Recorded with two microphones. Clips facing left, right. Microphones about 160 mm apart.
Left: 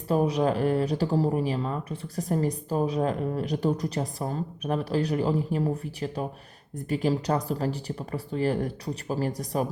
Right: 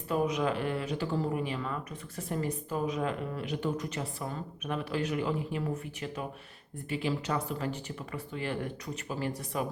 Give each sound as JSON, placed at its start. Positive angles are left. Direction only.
{"t": 0.1, "sound": "speech", "side_deg": 35}